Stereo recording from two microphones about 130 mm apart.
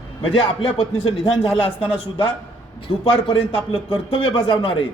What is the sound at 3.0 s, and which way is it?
A man's voice, 40° left (ahead or behind).